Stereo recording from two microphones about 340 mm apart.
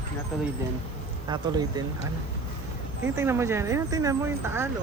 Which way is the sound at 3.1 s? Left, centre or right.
Centre.